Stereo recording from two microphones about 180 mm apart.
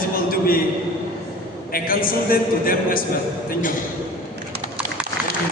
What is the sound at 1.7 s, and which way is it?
A man's voice, 55° left (ahead or behind).